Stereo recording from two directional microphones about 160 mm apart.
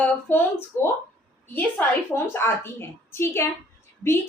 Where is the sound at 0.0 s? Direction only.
10° left (ahead or behind).